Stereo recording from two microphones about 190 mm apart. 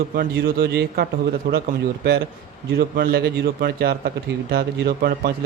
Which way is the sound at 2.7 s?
55° right (ahead or behind).